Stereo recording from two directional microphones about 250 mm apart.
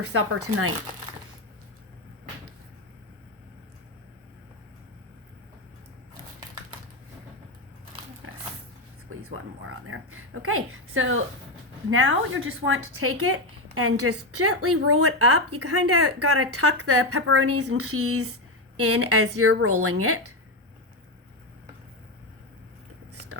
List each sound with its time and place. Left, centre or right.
0.0 s speech: right
9.0 s a sound: right
11.9 s speech: right